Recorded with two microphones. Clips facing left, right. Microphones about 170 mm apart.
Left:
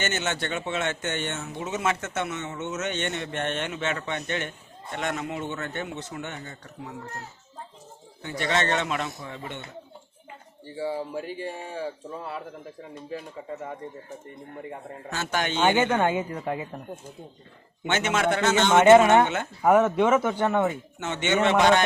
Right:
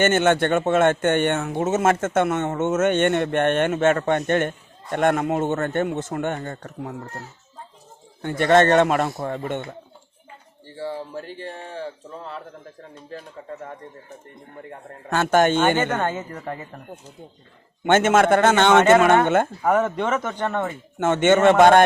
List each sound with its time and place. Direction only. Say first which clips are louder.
0.0 s speech: right 11 dB; 55° right (ahead or behind)
8.2 s speech: right 10 dB; 50° right (ahead or behind)
10.8 s speech: left 1 dB; 10° left (ahead or behind)
15.1 s speech: right 11 dB; 55° right (ahead or behind)
15.8 s speech: left 1 dB; 10° left (ahead or behind)
17.8 s speech: right 8 dB; 50° right (ahead or behind)
18.8 s speech: left 4 dB; 15° left (ahead or behind)
19.2 s speech: right 7 dB; 50° right (ahead or behind)
19.6 s speech: left 1 dB; 5° left (ahead or behind)
21.0 s speech: right 8 dB; 50° right (ahead or behind)